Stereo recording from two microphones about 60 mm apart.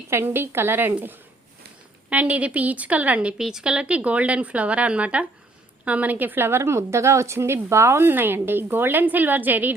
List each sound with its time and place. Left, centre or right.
0.1 s a woman's voice: right
3.3 s a woman's voice: centre; by 6.6 s right
6.6 s speech: right